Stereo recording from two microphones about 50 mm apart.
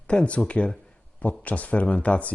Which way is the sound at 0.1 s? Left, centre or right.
Left.